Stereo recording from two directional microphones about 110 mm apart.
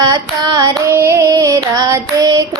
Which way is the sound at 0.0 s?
40° right (ahead or behind).